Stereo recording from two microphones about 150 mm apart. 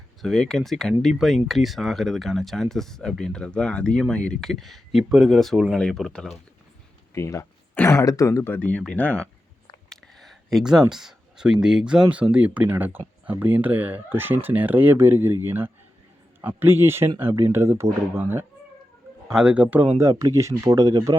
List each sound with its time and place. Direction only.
0.2 s speech: centre (ahead or behind)
7.1 s speech: 20° left (ahead or behind)
9.9 s a sound: centre (ahead or behind)
10.9 s speech: 5° right (ahead or behind)
20.0 s speech: 20° right (ahead or behind)